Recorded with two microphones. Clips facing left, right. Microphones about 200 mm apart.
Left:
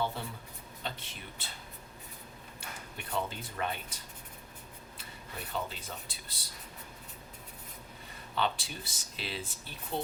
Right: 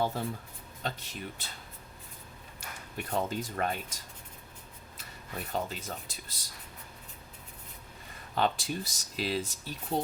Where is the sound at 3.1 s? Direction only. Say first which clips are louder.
Right 4 dB; 45° right (ahead or behind).